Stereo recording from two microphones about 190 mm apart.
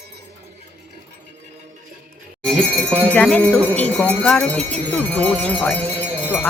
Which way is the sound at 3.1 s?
10° left (ahead or behind).